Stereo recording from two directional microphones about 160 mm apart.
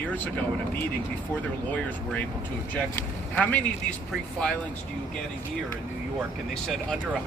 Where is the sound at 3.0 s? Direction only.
10° left (ahead or behind).